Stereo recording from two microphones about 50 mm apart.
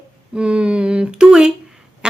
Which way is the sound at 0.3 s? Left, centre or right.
Centre.